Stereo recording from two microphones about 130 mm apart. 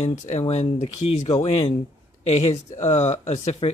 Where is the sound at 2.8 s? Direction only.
60° left (ahead or behind).